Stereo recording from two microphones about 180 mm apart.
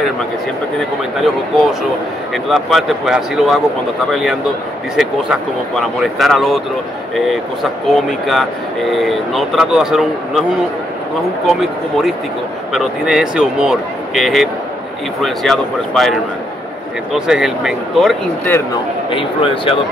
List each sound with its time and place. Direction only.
1.2 s speech: centre (ahead or behind)
7.9 s speech: centre (ahead or behind)
11.4 s speech: centre (ahead or behind)
19.0 s speech: 30° left (ahead or behind)